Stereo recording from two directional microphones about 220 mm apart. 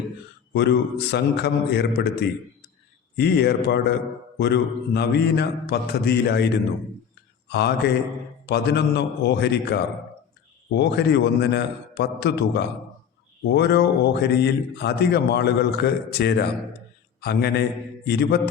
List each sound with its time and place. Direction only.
0.5 s a man's voice: 50° left (ahead or behind)
3.2 s a man's voice: 50° left (ahead or behind)